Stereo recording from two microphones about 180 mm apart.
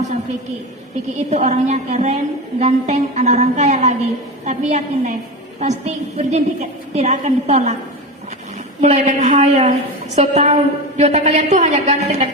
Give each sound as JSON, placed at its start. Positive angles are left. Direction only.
{"t": 1.3, "sound": "a woman's voice", "side_deg": -40}
{"t": 8.8, "sound": "a woman's voice", "side_deg": -40}